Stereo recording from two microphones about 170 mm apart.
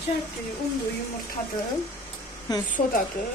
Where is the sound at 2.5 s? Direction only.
25° left (ahead or behind).